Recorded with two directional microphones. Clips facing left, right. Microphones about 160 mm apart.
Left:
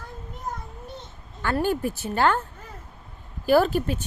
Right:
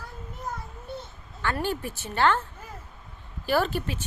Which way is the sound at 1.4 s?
45° left (ahead or behind).